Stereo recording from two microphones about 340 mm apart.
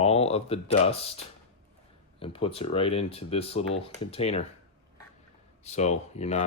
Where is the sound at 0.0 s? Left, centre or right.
Centre.